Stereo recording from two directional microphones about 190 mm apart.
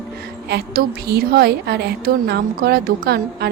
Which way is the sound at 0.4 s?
60° right (ahead or behind).